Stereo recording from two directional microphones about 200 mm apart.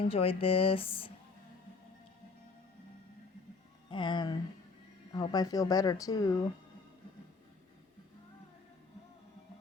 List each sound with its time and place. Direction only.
0.0 s speech: 30° left (ahead or behind)
3.8 s speech: 25° left (ahead or behind)